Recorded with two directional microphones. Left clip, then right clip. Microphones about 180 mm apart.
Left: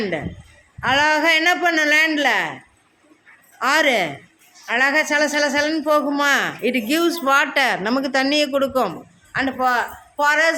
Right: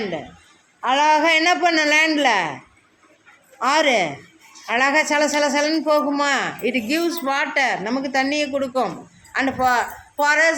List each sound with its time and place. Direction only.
0.8 s a woman's voice: 5° left (ahead or behind)
3.6 s a woman's voice: centre (ahead or behind); by 8.9 s 25° left (ahead or behind)
9.3 s speech: 5° left (ahead or behind)